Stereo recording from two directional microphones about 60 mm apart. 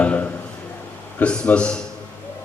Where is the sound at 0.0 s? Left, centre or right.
Left.